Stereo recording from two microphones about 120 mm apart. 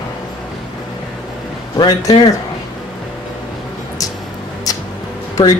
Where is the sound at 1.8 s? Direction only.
35° left (ahead or behind).